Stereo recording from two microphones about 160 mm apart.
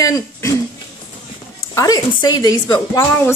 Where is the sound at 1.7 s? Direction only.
20° left (ahead or behind).